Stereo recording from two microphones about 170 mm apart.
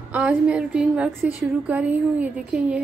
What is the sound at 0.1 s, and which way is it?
A woman's voice, 5° right (ahead or behind).